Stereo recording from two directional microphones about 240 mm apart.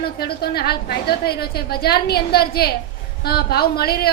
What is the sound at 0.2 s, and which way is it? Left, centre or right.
A woman's voice, left.